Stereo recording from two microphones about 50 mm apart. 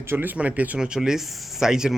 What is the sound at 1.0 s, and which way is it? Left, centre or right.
Speech, centre.